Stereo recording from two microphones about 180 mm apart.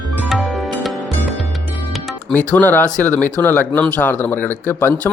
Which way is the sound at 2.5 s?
10° left (ahead or behind).